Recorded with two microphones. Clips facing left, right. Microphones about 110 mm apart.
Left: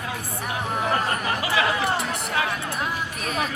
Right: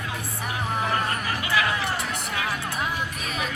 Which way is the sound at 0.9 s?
30° left (ahead or behind).